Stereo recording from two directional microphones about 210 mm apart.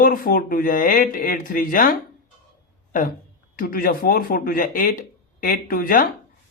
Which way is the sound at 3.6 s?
45° left (ahead or behind).